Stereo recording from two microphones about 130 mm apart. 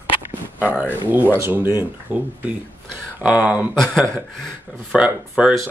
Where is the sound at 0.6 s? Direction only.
10° left (ahead or behind).